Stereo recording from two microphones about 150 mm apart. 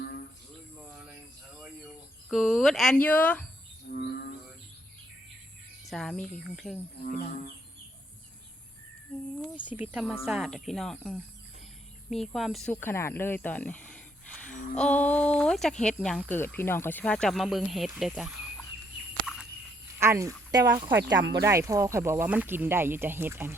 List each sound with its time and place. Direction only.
0.9 s a sound: 5° right (ahead or behind)
2.3 s speech: centre (ahead or behind)
3.8 s whale vocalization: 90° left
5.9 s speech: 5° left (ahead or behind)
9.9 s speech: 5° right (ahead or behind)
12.7 s speech: 15° left (ahead or behind); by 18.3 s 5° right (ahead or behind)
20.0 s speech: 20° right (ahead or behind)